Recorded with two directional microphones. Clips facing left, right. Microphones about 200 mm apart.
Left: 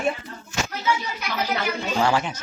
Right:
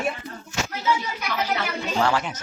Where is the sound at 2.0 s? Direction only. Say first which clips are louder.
Left 1 dB; 5° left (ahead or behind).